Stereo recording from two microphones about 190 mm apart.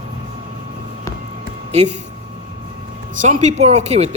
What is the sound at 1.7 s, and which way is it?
Speech, 35° right (ahead or behind).